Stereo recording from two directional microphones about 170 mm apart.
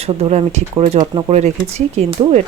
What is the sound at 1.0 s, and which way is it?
Speech, 25° right (ahead or behind).